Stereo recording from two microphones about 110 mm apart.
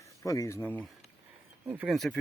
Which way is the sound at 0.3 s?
30° left (ahead or behind).